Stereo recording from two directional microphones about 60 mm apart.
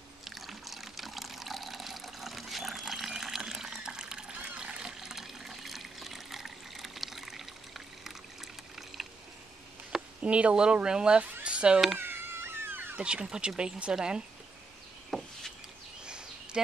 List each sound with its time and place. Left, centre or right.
0.2 s water: centre
10.2 s speech: centre
11.4 s cat: centre
12.0 s cat: right
12.9 s speech: centre
15.0 s knock: centre
16.1 s a sound: centre